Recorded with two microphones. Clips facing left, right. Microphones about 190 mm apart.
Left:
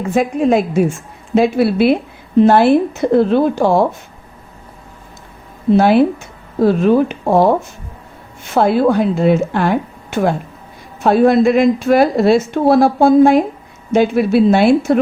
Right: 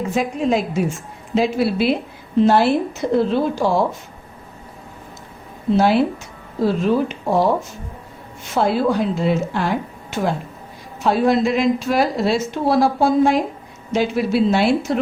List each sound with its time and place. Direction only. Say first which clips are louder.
0.1 s a woman's voice: left 7 dB; 55° left (ahead or behind)
5.7 s a woman's voice: left 5 dB; 55° left (ahead or behind)
8.5 s a woman's voice: left 5 dB; 55° left (ahead or behind)